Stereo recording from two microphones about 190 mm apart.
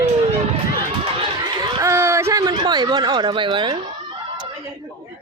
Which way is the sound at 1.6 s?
15° right (ahead or behind).